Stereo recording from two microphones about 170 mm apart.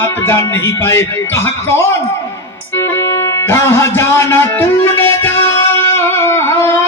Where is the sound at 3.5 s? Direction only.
15° left (ahead or behind).